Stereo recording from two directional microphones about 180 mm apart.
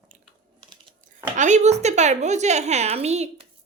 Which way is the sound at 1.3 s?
40° right (ahead or behind).